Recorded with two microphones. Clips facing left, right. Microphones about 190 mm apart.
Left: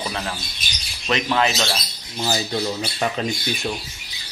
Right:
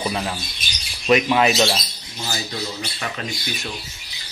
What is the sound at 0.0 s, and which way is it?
Bird, 10° right (ahead or behind).